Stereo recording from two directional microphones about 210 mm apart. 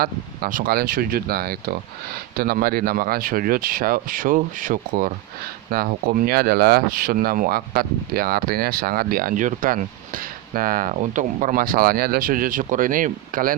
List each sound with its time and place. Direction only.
0.0 s speech: 40° right (ahead or behind)